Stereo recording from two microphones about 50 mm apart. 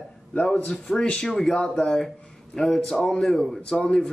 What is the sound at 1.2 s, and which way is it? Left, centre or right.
Speech, centre.